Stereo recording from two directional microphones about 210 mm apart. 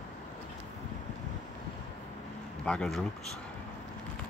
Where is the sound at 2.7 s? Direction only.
Centre (ahead or behind).